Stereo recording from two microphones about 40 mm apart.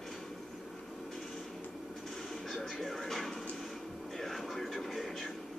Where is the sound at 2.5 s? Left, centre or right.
Centre.